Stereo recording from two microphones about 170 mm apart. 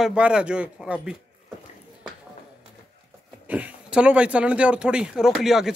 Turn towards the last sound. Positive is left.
turn(degrees=0)  # may be behind; listen again after turning